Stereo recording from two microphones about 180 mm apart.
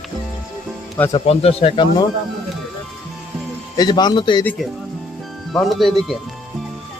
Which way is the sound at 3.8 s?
25° left (ahead or behind).